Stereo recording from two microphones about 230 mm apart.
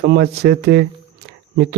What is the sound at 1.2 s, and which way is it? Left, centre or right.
Cricket, right.